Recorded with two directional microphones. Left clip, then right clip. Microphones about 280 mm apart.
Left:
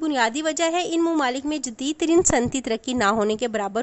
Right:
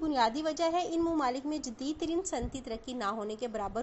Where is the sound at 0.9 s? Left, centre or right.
Left.